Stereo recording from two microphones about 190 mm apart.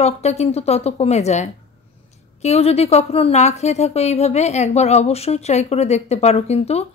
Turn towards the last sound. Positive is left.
turn(degrees=35)  # may be behind; listen again after turning